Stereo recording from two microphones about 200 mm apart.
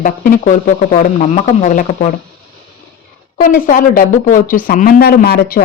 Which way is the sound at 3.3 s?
45° left (ahead or behind).